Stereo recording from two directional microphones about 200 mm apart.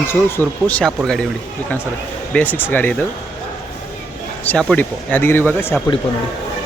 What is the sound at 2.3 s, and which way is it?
Speech, 10° left (ahead or behind).